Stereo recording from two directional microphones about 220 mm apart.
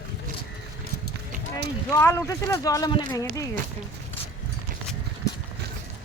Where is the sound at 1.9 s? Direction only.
15° left (ahead or behind).